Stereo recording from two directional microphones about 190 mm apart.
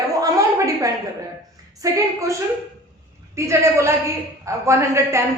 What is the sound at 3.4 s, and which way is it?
A woman's voice, 15° right (ahead or behind).